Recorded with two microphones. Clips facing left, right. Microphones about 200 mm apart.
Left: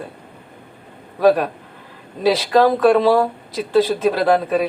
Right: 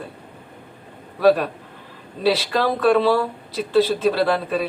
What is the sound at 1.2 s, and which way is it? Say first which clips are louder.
Speech: left 1 dB; 45° left (ahead or behind).